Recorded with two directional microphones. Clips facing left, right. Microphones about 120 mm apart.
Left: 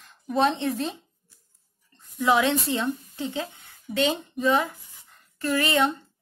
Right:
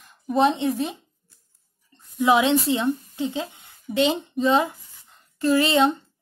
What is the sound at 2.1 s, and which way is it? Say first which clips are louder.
Speech: right 3 dB; 20° right (ahead or behind).